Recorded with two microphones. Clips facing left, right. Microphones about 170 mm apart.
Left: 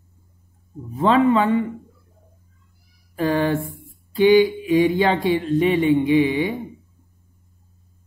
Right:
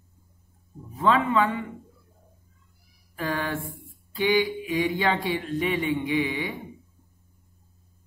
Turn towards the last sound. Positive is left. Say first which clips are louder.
# left 9 dB
turn(degrees=30)  # may be behind; listen again after turning